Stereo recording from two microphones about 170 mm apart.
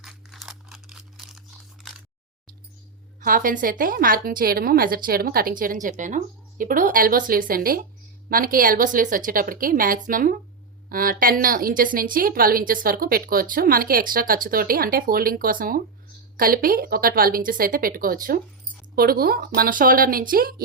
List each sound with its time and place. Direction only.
0.0 s crumpling: centre (ahead or behind)
3.2 s a woman's voice: 55° right (ahead or behind)